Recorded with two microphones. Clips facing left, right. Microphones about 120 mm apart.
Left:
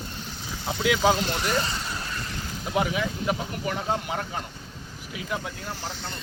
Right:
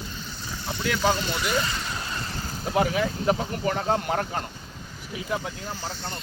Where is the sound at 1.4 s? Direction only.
35° left (ahead or behind).